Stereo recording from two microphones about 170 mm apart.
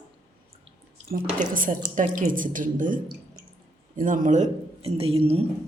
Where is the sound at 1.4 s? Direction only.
55° right (ahead or behind).